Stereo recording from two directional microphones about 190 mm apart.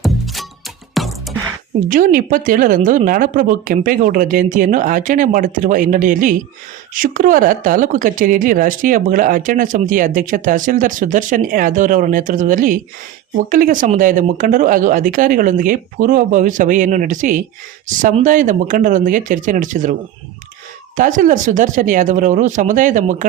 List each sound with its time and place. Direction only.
1.0 s music: centre (ahead or behind)
1.9 s speech: 45° right (ahead or behind)